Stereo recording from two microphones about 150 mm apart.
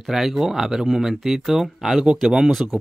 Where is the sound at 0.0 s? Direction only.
Centre (ahead or behind).